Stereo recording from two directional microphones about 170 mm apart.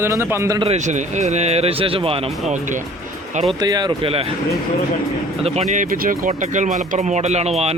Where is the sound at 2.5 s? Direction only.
50° right (ahead or behind).